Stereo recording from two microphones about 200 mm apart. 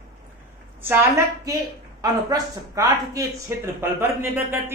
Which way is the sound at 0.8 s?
10° right (ahead or behind).